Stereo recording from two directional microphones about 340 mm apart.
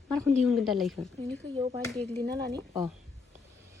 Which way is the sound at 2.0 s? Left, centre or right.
Centre.